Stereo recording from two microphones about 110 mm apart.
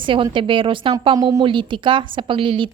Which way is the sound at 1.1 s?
35° right (ahead or behind).